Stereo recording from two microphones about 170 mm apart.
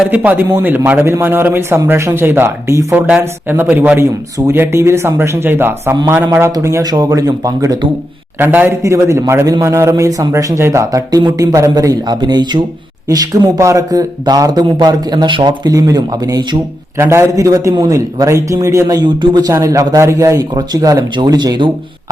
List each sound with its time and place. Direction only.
0.1 s a man's voice: 10° right (ahead or behind); by 21.7 s 25° right (ahead or behind)